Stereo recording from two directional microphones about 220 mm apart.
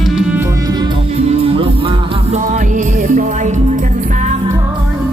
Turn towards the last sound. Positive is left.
turn(degrees=-35)  # may be behind; listen again after turning